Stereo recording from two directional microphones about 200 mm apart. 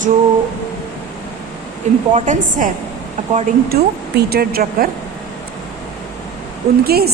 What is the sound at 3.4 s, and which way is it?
Speech, 50° right (ahead or behind).